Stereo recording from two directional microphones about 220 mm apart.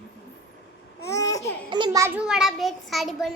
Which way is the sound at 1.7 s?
20° right (ahead or behind).